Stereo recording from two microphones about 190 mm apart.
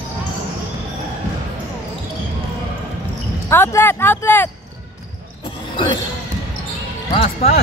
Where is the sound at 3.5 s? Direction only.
10° left (ahead or behind).